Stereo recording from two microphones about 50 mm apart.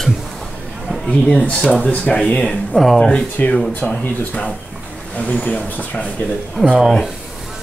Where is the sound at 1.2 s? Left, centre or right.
Left.